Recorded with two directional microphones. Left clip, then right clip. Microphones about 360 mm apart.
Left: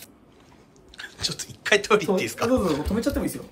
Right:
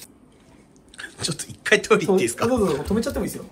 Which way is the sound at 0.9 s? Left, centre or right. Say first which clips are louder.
Even; centre.